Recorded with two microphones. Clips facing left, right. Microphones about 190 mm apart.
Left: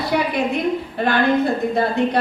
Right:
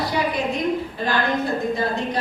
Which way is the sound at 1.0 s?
60° left (ahead or behind).